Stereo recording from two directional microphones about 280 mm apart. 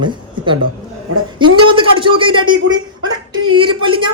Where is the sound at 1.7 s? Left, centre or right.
Centre.